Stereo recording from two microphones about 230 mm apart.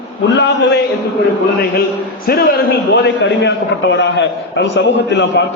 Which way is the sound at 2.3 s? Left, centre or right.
Left.